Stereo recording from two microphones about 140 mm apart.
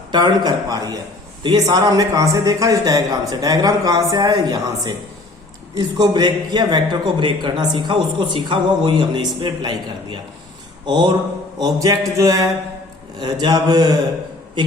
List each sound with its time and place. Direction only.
0.1 s a man's voice: 30° right (ahead or behind)